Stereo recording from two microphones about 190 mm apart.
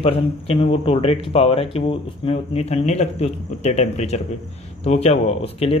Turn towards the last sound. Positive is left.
turn(degrees=30)  # may be behind; listen again after turning